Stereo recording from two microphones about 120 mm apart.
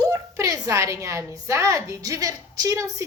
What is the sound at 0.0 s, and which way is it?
A woman's voice, 30° right (ahead or behind).